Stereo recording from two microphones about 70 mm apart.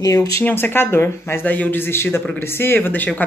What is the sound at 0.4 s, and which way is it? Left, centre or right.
A woman's voice, left.